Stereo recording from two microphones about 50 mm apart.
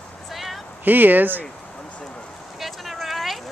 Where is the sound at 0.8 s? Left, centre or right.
Right.